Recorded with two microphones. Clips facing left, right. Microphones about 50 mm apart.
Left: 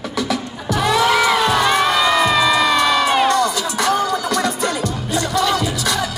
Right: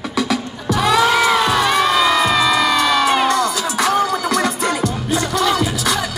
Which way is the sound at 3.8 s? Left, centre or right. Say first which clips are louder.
Right 1 dB; right.